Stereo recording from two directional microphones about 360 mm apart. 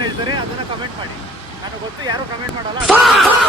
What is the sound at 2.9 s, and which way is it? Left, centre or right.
Speech, centre.